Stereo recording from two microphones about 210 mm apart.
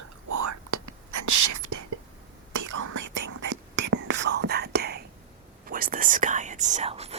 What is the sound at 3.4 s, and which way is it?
Whispering, 60° right (ahead or behind).